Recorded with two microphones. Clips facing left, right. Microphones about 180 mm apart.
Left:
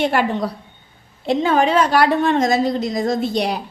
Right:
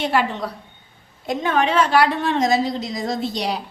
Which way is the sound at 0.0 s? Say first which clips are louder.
Left 2 dB; 50° left (ahead or behind).